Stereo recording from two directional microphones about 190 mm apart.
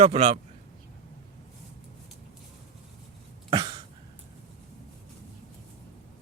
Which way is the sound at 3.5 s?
25° right (ahead or behind).